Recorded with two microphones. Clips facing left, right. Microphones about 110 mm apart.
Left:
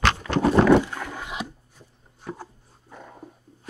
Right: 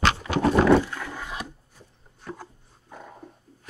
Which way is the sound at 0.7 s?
15° left (ahead or behind).